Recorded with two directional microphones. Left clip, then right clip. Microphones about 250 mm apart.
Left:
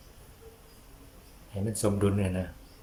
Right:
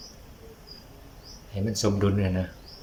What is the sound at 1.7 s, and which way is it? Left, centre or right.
Speech, centre.